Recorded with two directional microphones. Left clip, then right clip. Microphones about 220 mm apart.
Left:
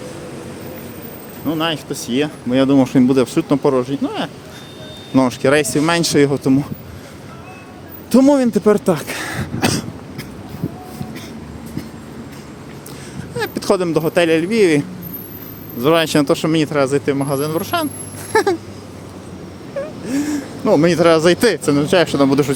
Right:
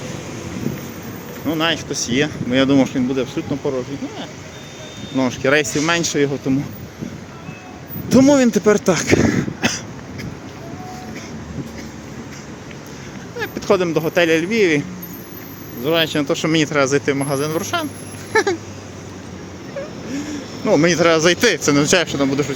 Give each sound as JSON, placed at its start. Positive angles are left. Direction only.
{"t": 1.5, "sound": "speech", "side_deg": 10}
{"t": 2.9, "sound": "speech", "side_deg": 30}
{"t": 5.1, "sound": "speech", "side_deg": 25}
{"t": 8.1, "sound": "speech", "side_deg": 20}
{"t": 8.9, "sound": "throat clearing", "side_deg": 10}
{"t": 13.3, "sound": "speech", "side_deg": 20}
{"t": 15.8, "sound": "speech", "side_deg": 35}
{"t": 16.5, "sound": "speech", "side_deg": 10}
{"t": 18.3, "sound": "a sound", "side_deg": 20}
{"t": 20.1, "sound": "a sound", "side_deg": 30}
{"t": 20.7, "sound": "speech", "side_deg": 15}
{"t": 22.0, "sound": "speech", "side_deg": 20}